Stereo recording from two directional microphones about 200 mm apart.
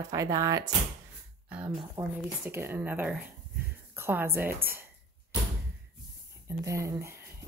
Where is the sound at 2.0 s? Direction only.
20° right (ahead or behind).